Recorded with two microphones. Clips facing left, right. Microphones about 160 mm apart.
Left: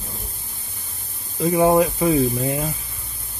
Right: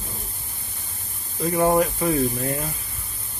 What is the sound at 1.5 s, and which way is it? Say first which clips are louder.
Speech: left 3 dB; 15° left (ahead or behind).